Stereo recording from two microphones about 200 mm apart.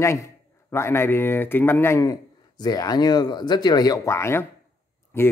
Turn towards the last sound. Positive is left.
turn(degrees=10)  # may be behind; listen again after turning